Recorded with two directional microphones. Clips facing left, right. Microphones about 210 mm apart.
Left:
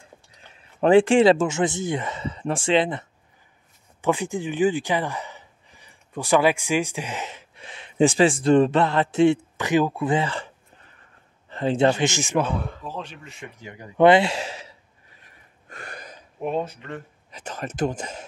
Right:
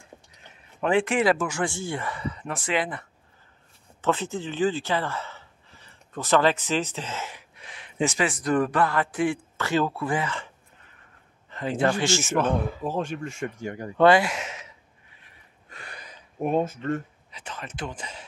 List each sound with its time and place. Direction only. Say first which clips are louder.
0.7 s speech: left 7 dB; 30° left (ahead or behind)
4.0 s speech: left 3 dB; 15° left (ahead or behind); by 10.5 s 35° left (ahead or behind)
11.5 s speech: left 4 dB; 25° left (ahead or behind)
12.8 s speech: right 7 dB; 50° right (ahead or behind)
13.9 s sigh: left 3 dB; 20° left (ahead or behind); by 16.2 s 45° left (ahead or behind)
16.4 s speech: right 3 dB; 45° right (ahead or behind)
17.3 s speech: left 7 dB; 45° left (ahead or behind)